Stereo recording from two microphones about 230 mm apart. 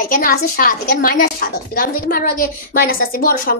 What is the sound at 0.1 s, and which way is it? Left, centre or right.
A woman's voice, left.